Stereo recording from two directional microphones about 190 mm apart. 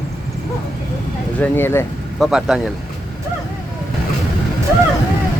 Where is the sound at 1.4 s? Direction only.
10° left (ahead or behind).